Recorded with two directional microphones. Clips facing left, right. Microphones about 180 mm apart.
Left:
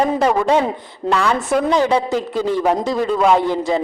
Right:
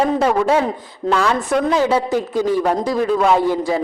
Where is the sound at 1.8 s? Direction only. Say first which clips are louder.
Even; 15° right (ahead or behind).